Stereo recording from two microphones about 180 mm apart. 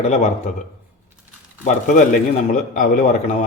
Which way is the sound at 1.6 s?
45° left (ahead or behind).